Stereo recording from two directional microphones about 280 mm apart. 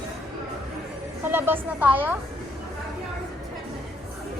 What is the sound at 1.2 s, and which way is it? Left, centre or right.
Speech, centre.